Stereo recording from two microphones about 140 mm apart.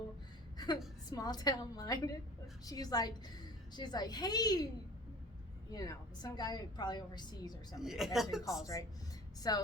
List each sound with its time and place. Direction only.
0.5 s a sound: 30° left (ahead or behind)
1.1 s a woman's voice: 30° left (ahead or behind)
5.7 s a woman's voice: 25° left (ahead or behind)
7.8 s speech: centre (ahead or behind)
9.5 s a woman's voice: 30° left (ahead or behind)